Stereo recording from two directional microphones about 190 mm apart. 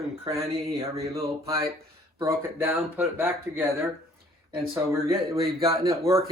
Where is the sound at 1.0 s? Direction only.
15° right (ahead or behind).